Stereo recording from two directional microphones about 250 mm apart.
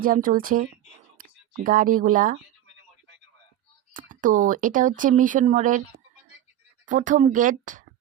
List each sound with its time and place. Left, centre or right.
0.0 s speech: right
1.2 s a sound: right
1.6 s speech: right
3.9 s speech: right
6.8 s speech: right